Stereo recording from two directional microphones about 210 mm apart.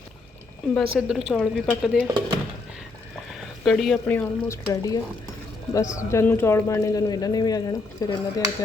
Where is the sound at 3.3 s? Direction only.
Centre (ahead or behind).